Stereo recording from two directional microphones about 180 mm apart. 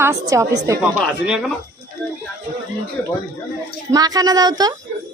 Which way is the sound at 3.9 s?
20° right (ahead or behind).